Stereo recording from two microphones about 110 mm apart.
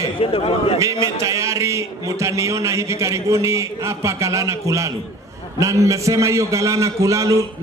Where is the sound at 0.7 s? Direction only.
30° right (ahead or behind).